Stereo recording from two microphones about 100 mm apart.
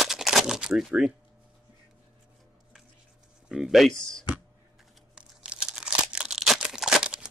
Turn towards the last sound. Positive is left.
turn(degrees=-5)  # may be behind; listen again after turning